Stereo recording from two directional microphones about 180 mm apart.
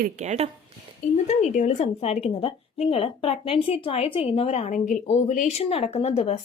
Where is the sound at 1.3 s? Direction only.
40° left (ahead or behind).